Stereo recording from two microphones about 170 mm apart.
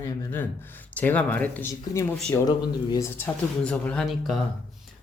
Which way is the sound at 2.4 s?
25° left (ahead or behind).